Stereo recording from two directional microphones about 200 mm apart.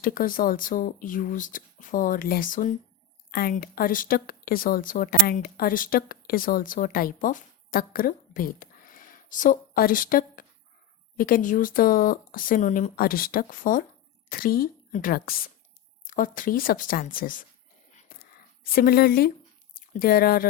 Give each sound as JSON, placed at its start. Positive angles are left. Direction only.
{"t": 0.0, "sound": "a woman's voice", "side_deg": 45}
{"t": 17.9, "sound": "whispering", "side_deg": 45}
{"t": 19.7, "sound": "speech", "side_deg": 45}